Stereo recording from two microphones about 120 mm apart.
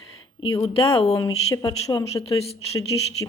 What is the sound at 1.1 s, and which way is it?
Speech, 30° left (ahead or behind).